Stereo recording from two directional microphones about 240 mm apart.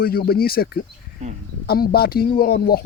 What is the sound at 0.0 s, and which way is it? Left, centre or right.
Speech, left.